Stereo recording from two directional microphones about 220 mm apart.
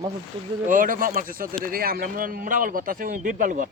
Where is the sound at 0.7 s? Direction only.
40° right (ahead or behind).